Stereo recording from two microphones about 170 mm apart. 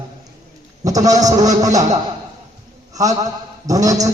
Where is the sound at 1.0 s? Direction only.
20° right (ahead or behind).